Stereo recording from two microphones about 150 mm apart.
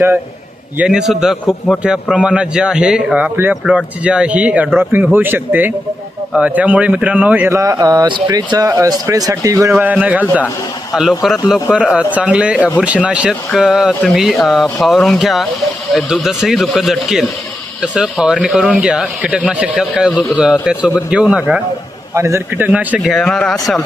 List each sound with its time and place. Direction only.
0.8 s speech: 5° right (ahead or behind)
7.5 s speech: 20° right (ahead or behind)
9.8 s speech: 10° right (ahead or behind)
12.5 s speech: 10° left (ahead or behind)
12.8 s speech: 10° right (ahead or behind)
22.1 s speech: 20° right (ahead or behind)
23.1 s speech: 5° left (ahead or behind)